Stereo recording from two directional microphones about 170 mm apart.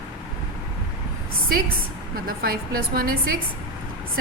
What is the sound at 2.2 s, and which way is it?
A woman's voice, 60° right (ahead or behind).